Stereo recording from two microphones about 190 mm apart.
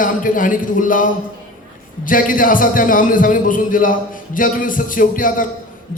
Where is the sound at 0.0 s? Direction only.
45° left (ahead or behind).